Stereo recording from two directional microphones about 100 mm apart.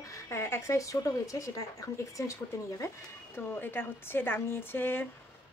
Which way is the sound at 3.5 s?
20° left (ahead or behind).